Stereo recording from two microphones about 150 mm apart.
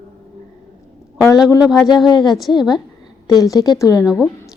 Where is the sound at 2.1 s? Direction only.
30° left (ahead or behind).